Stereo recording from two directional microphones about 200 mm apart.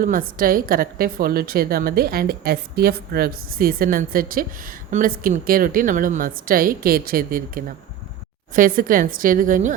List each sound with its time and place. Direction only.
0.0 s a woman's voice: 45° right (ahead or behind)